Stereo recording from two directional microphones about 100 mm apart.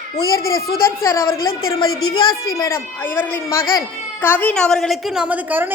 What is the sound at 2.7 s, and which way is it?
A woman's voice, 20° left (ahead or behind).